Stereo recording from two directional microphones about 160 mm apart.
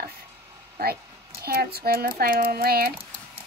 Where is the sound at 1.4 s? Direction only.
75° right (ahead or behind).